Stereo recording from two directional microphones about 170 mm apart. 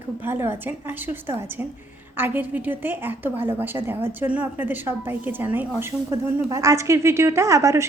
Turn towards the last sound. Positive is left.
turn(degrees=-20)  # may be behind; listen again after turning